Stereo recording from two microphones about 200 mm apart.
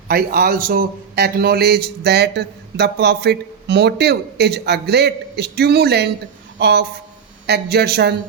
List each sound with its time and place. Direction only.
0.1 s a man's voice: 50° right (ahead or behind)